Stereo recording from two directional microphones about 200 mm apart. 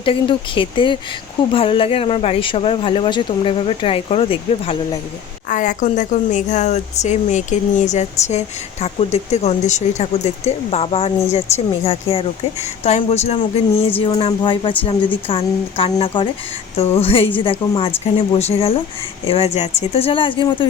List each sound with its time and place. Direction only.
0.0 s speech: 25° left (ahead or behind)
5.5 s speech: 40° left (ahead or behind); by 20.7 s 25° left (ahead or behind)